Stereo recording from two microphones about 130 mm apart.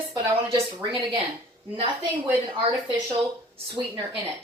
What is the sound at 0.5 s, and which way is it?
Speech, 45° right (ahead or behind).